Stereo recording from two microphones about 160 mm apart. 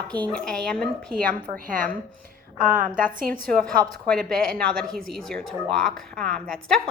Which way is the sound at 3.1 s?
60° right (ahead or behind).